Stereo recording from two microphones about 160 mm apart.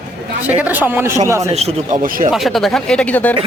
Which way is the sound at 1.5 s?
40° right (ahead or behind).